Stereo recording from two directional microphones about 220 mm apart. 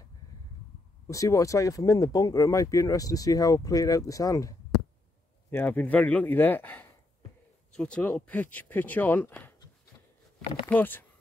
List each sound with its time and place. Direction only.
1.0 s speech: 15° left (ahead or behind)
10.7 s speech: 10° left (ahead or behind)